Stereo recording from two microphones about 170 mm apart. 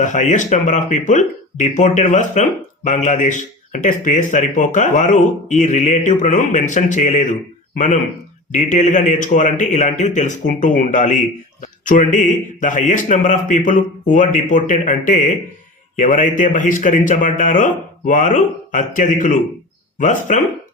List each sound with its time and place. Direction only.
0.0 s speech: 45° left (ahead or behind)
8.5 s speech: 45° left (ahead or behind)